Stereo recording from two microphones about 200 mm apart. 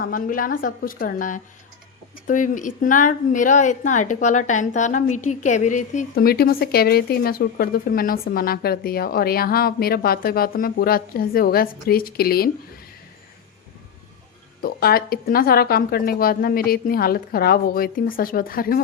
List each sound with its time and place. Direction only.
0.0 s a woman's voice: 45° left (ahead or behind)
14.6 s a woman's voice: 50° left (ahead or behind)